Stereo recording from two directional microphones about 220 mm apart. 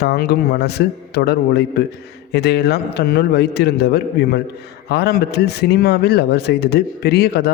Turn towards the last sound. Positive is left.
turn(degrees=45)  # may be behind; listen again after turning